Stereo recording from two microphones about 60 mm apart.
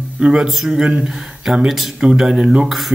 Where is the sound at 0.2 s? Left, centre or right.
Centre.